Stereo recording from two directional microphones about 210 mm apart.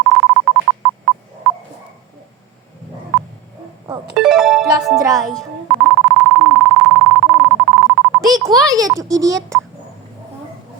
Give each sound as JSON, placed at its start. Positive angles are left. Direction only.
{"t": 0.1, "sound": "telephone dialing", "side_deg": 0}
{"t": 4.1, "sound": "music", "side_deg": -5}
{"t": 4.9, "sound": "music", "side_deg": -15}
{"t": 5.2, "sound": "beep", "side_deg": 0}
{"t": 8.7, "sound": "a child's voice", "side_deg": -15}